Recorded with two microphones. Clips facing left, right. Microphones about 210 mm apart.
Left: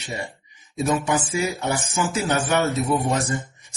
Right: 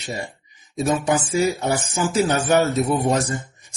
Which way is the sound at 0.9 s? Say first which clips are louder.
Right 2 dB; 35° right (ahead or behind).